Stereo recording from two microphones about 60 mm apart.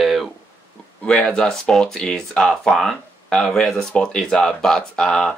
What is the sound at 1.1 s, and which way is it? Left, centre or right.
Speech, centre.